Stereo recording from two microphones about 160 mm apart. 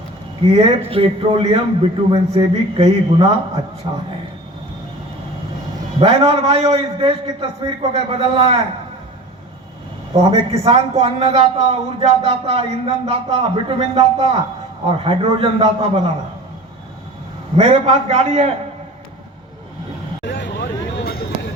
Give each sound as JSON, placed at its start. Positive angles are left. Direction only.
{"t": 0.4, "sound": "speech", "side_deg": -35}
{"t": 6.0, "sound": "speech", "side_deg": -35}
{"t": 10.1, "sound": "a man's voice", "side_deg": -35}
{"t": 17.6, "sound": "speech", "side_deg": -35}
{"t": 20.2, "sound": "vehicle", "side_deg": 90}